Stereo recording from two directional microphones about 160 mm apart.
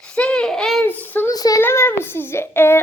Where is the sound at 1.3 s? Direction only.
20° left (ahead or behind).